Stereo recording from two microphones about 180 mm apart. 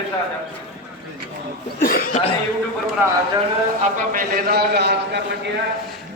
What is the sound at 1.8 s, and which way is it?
Cough, 55° left (ahead or behind).